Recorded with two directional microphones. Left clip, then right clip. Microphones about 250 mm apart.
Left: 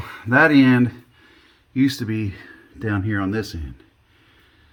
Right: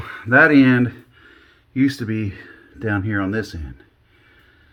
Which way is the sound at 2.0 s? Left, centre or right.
Left.